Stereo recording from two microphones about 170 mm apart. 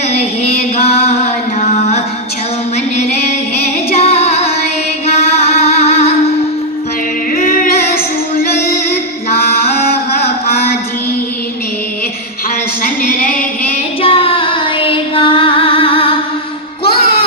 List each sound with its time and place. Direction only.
0.2 s music: 40° left (ahead or behind)
3.6 s music: 40° left (ahead or behind)
7.3 s music: 55° left (ahead or behind)
9.4 s chant: 65° left (ahead or behind)
12.8 s a sound: 55° left (ahead or behind)
14.0 s child singing: 30° left (ahead or behind)
16.8 s music: 30° left (ahead or behind)